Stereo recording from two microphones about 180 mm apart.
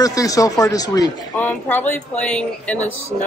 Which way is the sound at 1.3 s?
10° left (ahead or behind).